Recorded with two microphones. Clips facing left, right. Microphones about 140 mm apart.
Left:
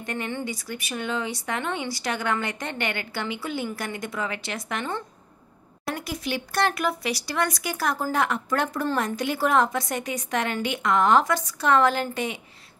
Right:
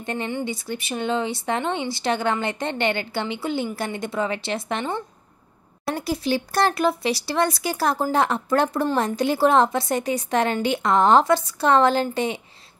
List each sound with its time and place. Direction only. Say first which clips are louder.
0.0 s a woman's voice: right 3 dB; 25° right (ahead or behind)